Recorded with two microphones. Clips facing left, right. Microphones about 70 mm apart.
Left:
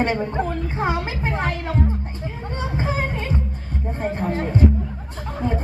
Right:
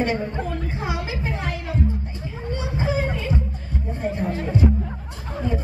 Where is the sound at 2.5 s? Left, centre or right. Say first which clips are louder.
Right 1 dB; left.